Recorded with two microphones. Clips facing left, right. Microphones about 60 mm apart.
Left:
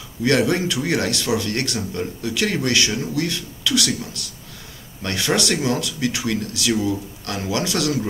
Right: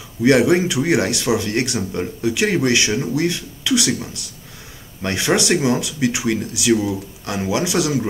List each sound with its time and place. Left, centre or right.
0.2 s speech: centre